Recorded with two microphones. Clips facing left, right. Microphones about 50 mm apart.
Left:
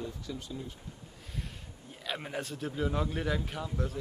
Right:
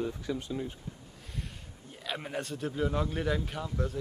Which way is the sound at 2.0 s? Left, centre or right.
Centre.